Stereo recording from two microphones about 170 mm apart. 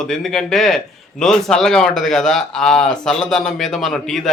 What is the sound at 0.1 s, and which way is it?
A man's voice, centre (ahead or behind).